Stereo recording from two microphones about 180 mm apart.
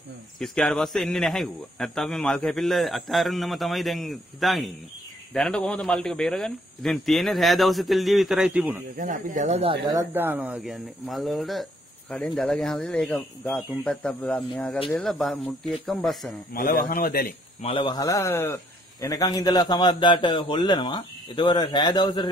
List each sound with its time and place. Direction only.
0.4 s speech: centre (ahead or behind)
8.9 s speech: 45° right (ahead or behind)
9.8 s speech: 15° right (ahead or behind); by 16.3 s centre (ahead or behind)
16.5 s speech: 55° left (ahead or behind)
17.6 s a man's voice: 30° left (ahead or behind)